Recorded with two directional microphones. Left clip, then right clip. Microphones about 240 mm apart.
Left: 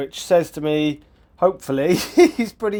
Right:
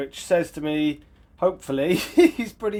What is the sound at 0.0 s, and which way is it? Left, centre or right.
Speech, left.